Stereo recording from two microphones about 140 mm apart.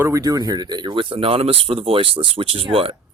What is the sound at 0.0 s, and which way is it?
Speech, 25° right (ahead or behind).